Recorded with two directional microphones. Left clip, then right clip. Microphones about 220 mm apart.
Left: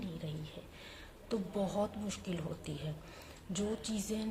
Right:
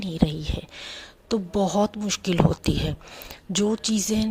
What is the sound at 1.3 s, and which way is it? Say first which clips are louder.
A woman's voice: right 13 dB; 40° right (ahead or behind).